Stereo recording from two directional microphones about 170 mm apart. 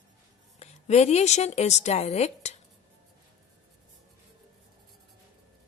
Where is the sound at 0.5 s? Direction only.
40° left (ahead or behind).